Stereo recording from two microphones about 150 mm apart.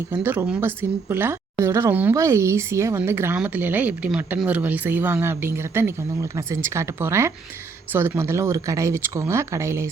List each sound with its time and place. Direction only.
0.1 s speech: 10° right (ahead or behind)